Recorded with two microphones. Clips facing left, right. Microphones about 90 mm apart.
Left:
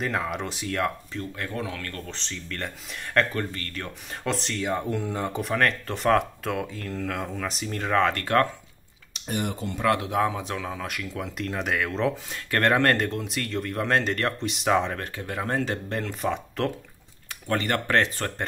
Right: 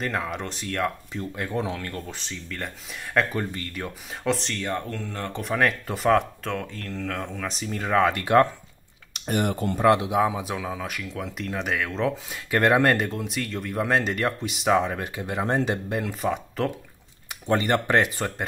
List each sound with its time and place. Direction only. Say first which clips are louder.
0.0 s speech: left 1 dB; centre (ahead or behind)
1.1 s speech: right 3 dB; 15° right (ahead or behind); by 3.3 s centre (ahead or behind)
3.3 s speech: right 1 dB; 15° right (ahead or behind)
4.1 s speech: right 2 dB; centre (ahead or behind)
5.4 s speech: right 2 dB; 5° right (ahead or behind)
9.1 s speech: right 4 dB; 55° right (ahead or behind)
9.8 s speech: right 4 dB; 20° right (ahead or behind)
10.1 s speech: right 2 dB; 10° right (ahead or behind)
17.3 s speech: right 4 dB; 20° right (ahead or behind)